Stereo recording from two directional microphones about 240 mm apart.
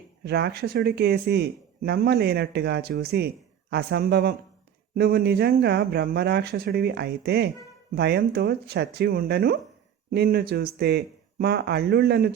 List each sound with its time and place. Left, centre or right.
0.3 s speech: right